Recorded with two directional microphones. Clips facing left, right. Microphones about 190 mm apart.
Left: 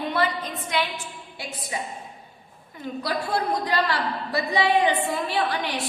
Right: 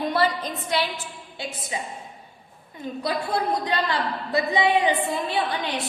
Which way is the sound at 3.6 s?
20° right (ahead or behind).